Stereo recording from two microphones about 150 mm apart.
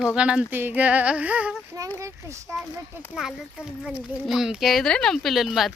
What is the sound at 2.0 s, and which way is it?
Speech, 20° right (ahead or behind).